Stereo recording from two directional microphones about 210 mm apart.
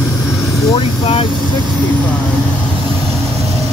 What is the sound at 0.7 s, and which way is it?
Speech, 25° left (ahead or behind).